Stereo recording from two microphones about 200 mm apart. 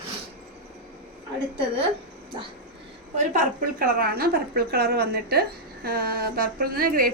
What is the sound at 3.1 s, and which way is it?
A woman's voice, 45° right (ahead or behind).